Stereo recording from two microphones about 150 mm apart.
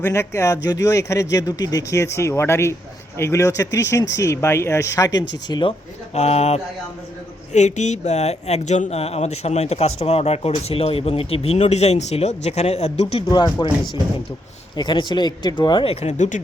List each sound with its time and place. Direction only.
0.0 s speech: 15° left (ahead or behind)
6.1 s speech: 45° left (ahead or behind)
13.2 s speech: 30° left (ahead or behind); by 16.4 s 55° left (ahead or behind)